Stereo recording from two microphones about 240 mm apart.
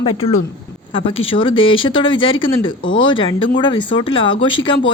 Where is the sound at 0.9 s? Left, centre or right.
Left.